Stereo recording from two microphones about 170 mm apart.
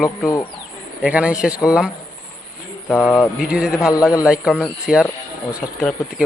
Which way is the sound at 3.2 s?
5° right (ahead or behind).